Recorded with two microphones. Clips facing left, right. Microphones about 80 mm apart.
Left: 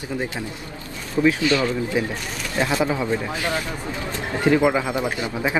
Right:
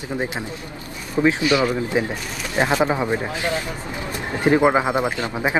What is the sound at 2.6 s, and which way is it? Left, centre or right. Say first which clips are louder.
Speech: right 3 dB; right.